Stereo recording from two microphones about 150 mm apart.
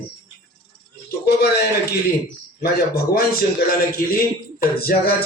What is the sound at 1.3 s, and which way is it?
A man's voice, 90° left.